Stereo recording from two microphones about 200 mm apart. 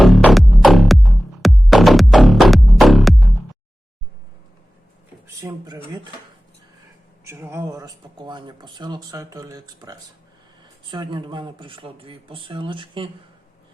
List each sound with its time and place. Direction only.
0.0 s music: centre (ahead or behind)
5.4 s speech: 15° right (ahead or behind)
7.3 s speech: 15° right (ahead or behind)